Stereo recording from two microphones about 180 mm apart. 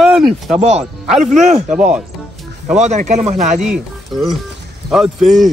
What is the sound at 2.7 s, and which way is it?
Speech, 40° right (ahead or behind).